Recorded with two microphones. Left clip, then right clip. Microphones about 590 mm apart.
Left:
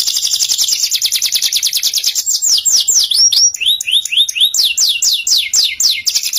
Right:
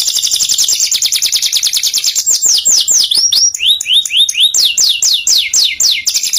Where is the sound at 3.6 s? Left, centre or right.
Left.